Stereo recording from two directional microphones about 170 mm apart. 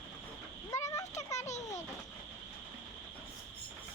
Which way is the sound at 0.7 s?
20° left (ahead or behind).